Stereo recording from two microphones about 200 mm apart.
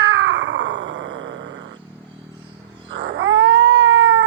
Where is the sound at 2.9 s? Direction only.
55° right (ahead or behind).